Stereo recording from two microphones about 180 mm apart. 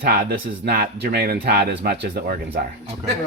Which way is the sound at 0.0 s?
60° right (ahead or behind).